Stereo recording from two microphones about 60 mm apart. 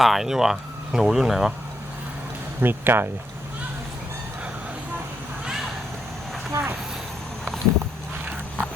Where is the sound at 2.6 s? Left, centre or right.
Right.